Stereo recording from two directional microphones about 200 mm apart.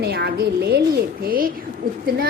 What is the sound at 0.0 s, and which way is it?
A woman's voice, 50° right (ahead or behind).